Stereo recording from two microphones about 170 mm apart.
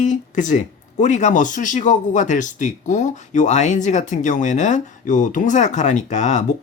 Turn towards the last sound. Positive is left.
turn(degrees=45)  # may be behind; listen again after turning